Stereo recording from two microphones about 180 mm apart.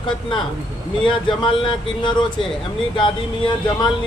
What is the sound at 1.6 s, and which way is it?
A man's voice, 25° left (ahead or behind).